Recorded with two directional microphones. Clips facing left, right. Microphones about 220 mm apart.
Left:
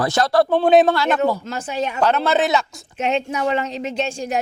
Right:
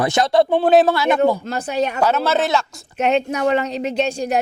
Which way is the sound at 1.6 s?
65° right (ahead or behind).